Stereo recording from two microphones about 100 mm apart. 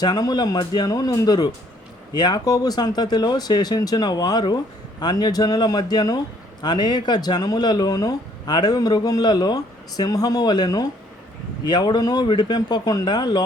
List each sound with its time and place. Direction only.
0.0 s speech: 40° left (ahead or behind)